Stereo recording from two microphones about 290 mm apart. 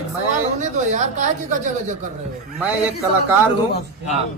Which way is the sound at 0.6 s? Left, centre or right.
Right.